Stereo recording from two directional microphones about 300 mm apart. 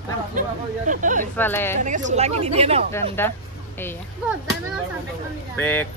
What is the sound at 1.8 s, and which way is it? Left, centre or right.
Speech, right.